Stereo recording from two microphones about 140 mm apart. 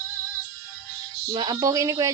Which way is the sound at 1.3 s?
35° right (ahead or behind).